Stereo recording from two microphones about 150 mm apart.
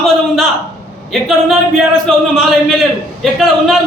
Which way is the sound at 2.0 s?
5° left (ahead or behind).